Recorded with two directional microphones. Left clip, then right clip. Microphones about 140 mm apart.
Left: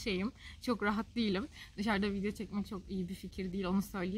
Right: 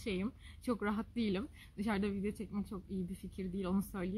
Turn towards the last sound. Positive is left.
turn(degrees=15)  # may be behind; listen again after turning